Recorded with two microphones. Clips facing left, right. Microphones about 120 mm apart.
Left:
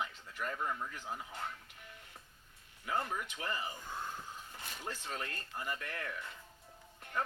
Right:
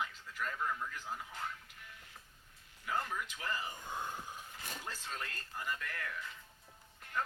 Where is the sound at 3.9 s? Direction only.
15° right (ahead or behind).